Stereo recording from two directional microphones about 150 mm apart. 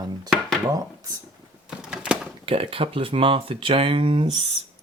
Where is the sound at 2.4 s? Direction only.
40° right (ahead or behind).